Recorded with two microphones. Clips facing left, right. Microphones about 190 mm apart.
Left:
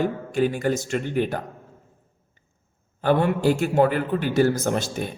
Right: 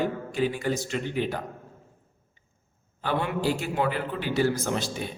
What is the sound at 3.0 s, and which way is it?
A man's voice, 50° left (ahead or behind).